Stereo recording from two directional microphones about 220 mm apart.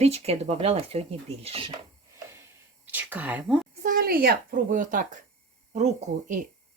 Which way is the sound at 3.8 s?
40° right (ahead or behind).